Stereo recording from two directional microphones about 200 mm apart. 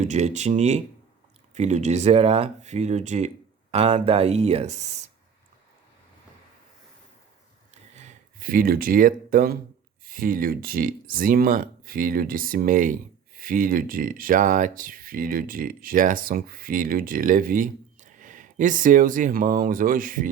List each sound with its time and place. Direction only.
0.0 s speech: 35° right (ahead or behind)
7.7 s a sound: 35° right (ahead or behind)
10.1 s speech: 45° right (ahead or behind)